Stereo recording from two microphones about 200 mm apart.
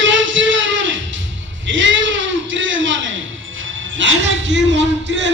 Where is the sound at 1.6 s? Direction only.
70° right (ahead or behind).